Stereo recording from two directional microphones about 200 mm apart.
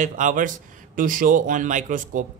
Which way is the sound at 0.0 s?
40° right (ahead or behind).